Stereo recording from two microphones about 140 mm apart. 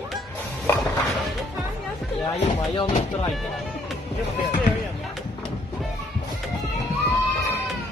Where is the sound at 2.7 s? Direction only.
40° left (ahead or behind).